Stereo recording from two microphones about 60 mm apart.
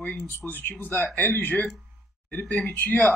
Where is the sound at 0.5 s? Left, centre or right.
Left.